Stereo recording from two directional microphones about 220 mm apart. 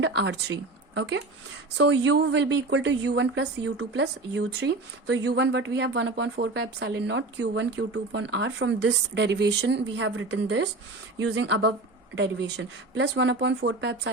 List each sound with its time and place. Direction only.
0.0 s speech: 50° right (ahead or behind)
1.8 s speech: 55° right (ahead or behind)